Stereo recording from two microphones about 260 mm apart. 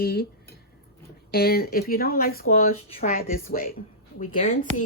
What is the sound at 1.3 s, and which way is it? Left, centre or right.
Speech, left.